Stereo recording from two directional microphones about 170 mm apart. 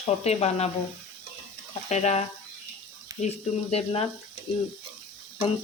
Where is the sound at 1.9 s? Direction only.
40° left (ahead or behind).